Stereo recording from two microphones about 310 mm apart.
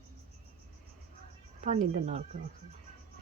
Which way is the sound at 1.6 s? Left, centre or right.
Right.